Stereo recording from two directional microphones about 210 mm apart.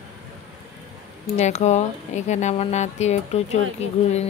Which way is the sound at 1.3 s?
35° left (ahead or behind).